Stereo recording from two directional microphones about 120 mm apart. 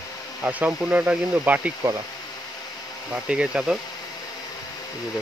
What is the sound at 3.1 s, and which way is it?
Speech, 10° right (ahead or behind).